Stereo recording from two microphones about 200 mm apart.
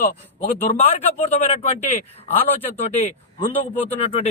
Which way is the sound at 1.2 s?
35° left (ahead or behind).